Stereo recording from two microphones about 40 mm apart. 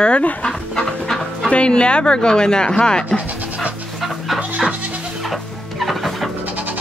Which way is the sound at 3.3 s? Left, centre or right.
Right.